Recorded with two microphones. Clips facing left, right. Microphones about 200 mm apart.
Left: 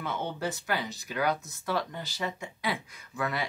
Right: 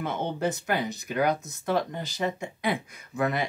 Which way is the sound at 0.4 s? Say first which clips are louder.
Right 5 dB; 50° right (ahead or behind).